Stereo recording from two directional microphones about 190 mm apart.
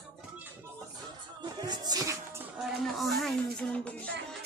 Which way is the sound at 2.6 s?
Centre (ahead or behind).